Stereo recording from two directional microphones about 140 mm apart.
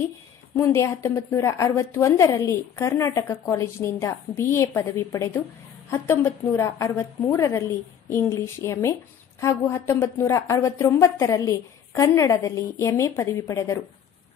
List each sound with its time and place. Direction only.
0.6 s a woman's voice: 15° left (ahead or behind)